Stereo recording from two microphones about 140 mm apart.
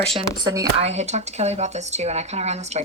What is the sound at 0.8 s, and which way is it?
Speech, 50° right (ahead or behind).